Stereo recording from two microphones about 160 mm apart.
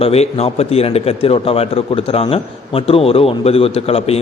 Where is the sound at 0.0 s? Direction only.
40° left (ahead or behind).